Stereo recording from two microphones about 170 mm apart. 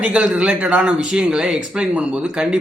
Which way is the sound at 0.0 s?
5° right (ahead or behind).